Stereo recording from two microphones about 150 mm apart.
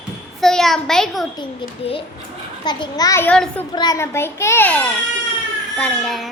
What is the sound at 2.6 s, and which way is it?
Speech, 25° left (ahead or behind).